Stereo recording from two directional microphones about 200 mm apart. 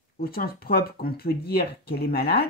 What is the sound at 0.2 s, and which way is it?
Speech, 50° left (ahead or behind).